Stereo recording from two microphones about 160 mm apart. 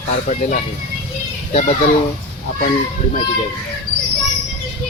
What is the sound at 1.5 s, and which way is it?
Speech, 45° left (ahead or behind).